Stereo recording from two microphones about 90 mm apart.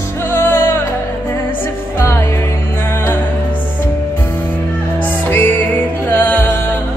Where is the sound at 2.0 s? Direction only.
30° left (ahead or behind).